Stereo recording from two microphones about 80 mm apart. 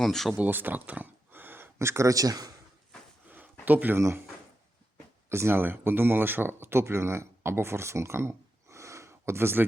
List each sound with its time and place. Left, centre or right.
0.0 s speech: centre
0.3 s speech: right
3.2 s a sound: right
5.3 s speech: right